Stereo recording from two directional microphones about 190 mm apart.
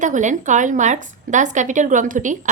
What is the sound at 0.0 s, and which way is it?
A woman's voice, 40° right (ahead or behind).